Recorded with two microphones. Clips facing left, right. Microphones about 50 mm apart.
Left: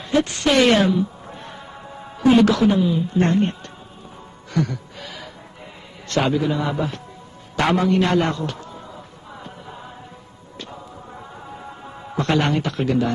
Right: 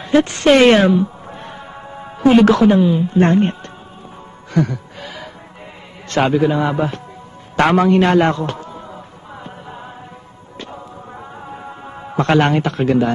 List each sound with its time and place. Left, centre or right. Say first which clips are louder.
0.2 s a woman's voice: right 6 dB; right
6.0 s a woman's voice: right 5 dB; right
12.2 s a woman's voice: right 6 dB; right